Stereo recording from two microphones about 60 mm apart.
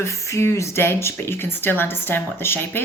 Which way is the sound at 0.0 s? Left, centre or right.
Left.